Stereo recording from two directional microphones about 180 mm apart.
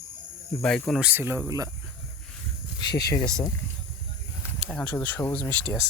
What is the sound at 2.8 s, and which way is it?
Speech, 20° left (ahead or behind).